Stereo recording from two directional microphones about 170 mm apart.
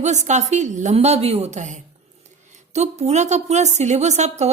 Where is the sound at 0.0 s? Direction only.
45° right (ahead or behind).